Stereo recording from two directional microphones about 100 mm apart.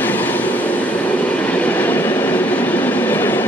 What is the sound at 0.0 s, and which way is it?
Train, 15° left (ahead or behind).